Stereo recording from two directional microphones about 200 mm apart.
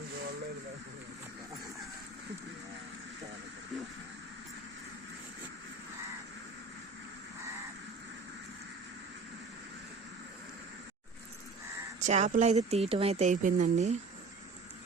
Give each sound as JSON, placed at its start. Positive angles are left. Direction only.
{"t": 11.9, "sound": "speech", "side_deg": -35}